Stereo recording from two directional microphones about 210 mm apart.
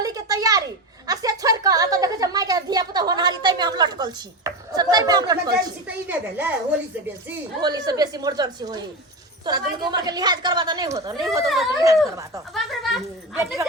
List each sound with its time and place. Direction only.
0.0 s a sound: 15° right (ahead or behind)
6.1 s a child's voice: 10° right (ahead or behind)
7.6 s a woman's voice: 20° right (ahead or behind)
11.4 s speech: centre (ahead or behind)
12.5 s a sound: centre (ahead or behind)
13.3 s a child's voice: 10° right (ahead or behind)